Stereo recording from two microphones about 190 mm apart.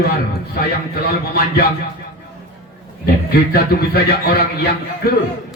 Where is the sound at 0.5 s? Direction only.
50° left (ahead or behind).